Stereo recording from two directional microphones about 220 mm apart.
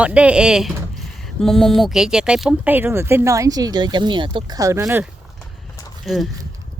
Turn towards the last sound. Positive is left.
turn(degrees=0)  # may be behind; listen again after turning